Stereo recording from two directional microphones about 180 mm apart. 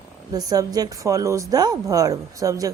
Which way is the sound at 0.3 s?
20° right (ahead or behind).